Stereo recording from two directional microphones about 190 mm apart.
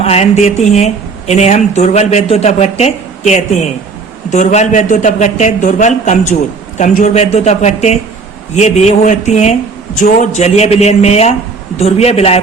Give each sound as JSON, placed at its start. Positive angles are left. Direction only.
{"t": 0.0, "sound": "speech", "side_deg": 35}